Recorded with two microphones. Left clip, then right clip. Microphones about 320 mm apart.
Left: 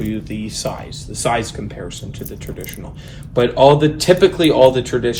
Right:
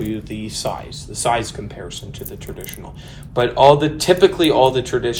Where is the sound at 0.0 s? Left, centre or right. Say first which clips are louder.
Left 1 dB; centre.